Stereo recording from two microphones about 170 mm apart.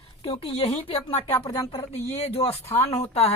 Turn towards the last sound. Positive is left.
turn(degrees=35)  # may be behind; listen again after turning